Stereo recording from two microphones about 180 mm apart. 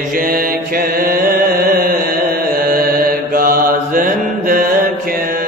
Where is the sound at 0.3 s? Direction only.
55° right (ahead or behind).